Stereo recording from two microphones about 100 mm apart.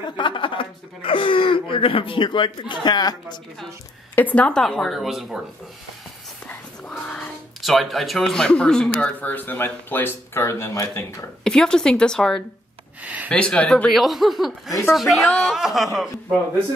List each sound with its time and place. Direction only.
0.1 s speech: 55° left (ahead or behind)
4.1 s a woman's voice: 15° left (ahead or behind); by 5.4 s centre (ahead or behind)
6.4 s speech: 10° left (ahead or behind); by 11.2 s 35° left (ahead or behind)
11.4 s a woman's voice: 5° left (ahead or behind)
13.0 s speech: 15° right (ahead or behind)
13.3 s speech: 10° left (ahead or behind)
14.7 s a woman's voice: 30° left (ahead or behind)
15.0 s speech: centre (ahead or behind)